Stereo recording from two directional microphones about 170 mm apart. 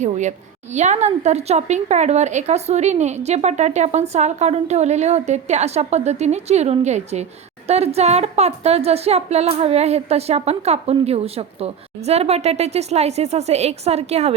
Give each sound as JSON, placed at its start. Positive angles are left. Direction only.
{"t": 0.0, "sound": "a woman's voice", "side_deg": -45}